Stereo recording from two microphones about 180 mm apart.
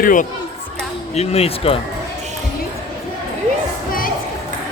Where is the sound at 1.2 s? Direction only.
35° left (ahead or behind).